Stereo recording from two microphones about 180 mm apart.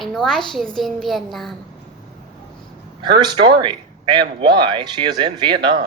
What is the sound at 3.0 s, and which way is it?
Speech, 25° right (ahead or behind).